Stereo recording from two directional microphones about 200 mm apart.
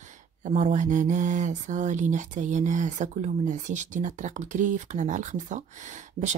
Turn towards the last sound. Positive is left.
turn(degrees=-35)  # may be behind; listen again after turning